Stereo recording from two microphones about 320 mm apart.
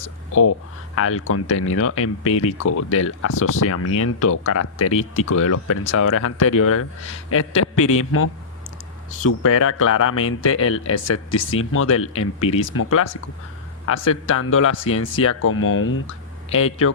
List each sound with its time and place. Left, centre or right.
0.9 s speech: left